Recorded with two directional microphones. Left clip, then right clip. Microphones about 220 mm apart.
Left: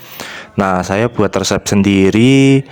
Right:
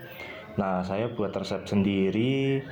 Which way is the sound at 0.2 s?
50° left (ahead or behind).